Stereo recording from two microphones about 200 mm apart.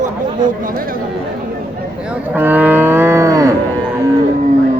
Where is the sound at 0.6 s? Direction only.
45° right (ahead or behind).